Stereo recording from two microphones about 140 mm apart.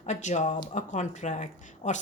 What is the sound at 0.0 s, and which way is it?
A woman's voice, 55° left (ahead or behind).